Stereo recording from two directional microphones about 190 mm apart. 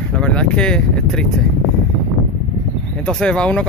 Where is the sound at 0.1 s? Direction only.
5° left (ahead or behind).